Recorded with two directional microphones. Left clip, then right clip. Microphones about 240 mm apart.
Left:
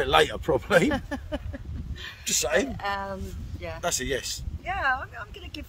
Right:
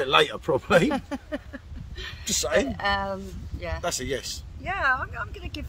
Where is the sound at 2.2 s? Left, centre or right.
Left.